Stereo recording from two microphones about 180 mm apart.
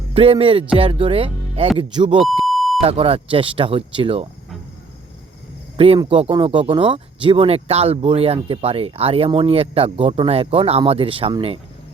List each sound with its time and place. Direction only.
0.1 s speech: 30° right (ahead or behind)
2.5 s beep: centre (ahead or behind)
2.8 s speech: 30° right (ahead or behind)
5.7 s speech: 35° right (ahead or behind)